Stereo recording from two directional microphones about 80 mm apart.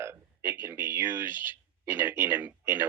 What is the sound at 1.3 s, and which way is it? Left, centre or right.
Speech, left.